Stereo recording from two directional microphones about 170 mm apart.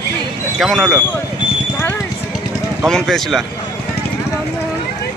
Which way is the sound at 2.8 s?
Centre (ahead or behind).